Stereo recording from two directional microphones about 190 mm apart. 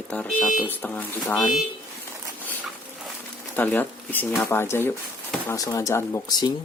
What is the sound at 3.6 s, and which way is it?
Speech, 10° left (ahead or behind).